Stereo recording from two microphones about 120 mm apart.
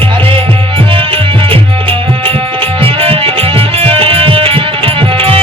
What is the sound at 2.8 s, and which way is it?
Music, 50° right (ahead or behind).